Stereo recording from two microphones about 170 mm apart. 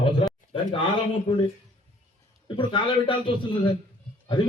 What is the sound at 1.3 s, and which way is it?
Speech, 30° left (ahead or behind).